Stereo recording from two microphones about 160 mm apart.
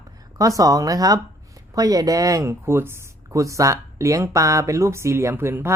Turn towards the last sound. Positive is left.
turn(degrees=-15)  # may be behind; listen again after turning